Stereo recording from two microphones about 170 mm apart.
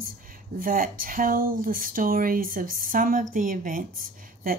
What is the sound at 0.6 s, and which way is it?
Speech, 55° right (ahead or behind).